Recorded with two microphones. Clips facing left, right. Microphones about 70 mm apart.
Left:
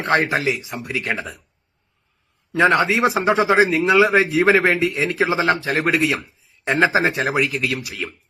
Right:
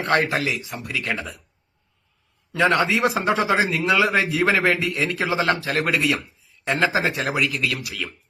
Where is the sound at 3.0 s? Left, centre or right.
Centre.